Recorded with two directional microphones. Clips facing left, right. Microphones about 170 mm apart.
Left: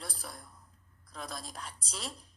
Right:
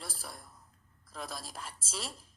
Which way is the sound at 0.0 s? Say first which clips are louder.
Left 1 dB; centre (ahead or behind).